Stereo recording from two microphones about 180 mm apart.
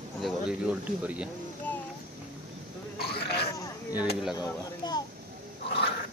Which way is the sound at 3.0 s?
60° left (ahead or behind).